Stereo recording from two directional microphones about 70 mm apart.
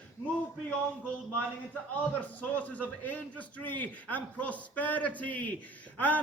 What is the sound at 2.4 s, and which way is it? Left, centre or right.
A man's voice, left.